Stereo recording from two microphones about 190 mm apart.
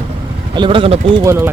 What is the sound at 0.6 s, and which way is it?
Speech, 30° right (ahead or behind).